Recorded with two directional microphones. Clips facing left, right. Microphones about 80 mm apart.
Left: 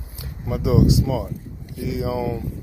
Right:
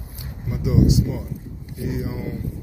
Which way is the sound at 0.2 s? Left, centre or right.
Left.